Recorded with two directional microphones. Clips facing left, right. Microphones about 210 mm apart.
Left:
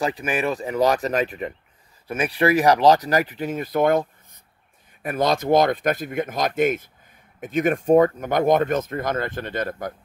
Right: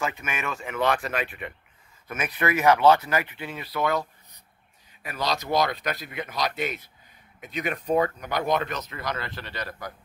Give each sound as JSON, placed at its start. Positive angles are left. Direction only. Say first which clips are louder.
{"t": 0.0, "sound": "speech", "louder": "left 7 dB", "side_deg": 35}